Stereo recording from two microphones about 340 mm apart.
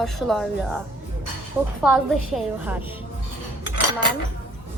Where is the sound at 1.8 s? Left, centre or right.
Centre.